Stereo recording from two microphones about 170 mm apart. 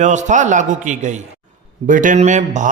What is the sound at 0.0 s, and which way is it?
A man's voice, 45° right (ahead or behind).